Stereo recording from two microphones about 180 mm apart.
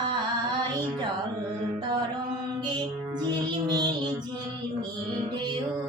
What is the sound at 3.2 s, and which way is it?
Music, 25° right (ahead or behind).